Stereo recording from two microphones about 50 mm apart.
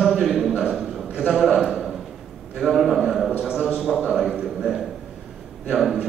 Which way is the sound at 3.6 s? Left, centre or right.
Centre.